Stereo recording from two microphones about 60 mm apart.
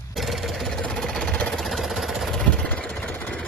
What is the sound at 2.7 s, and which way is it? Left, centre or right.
Engine, left.